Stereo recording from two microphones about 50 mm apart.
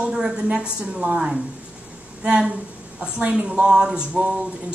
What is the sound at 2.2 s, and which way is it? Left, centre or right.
A woman's voice, right.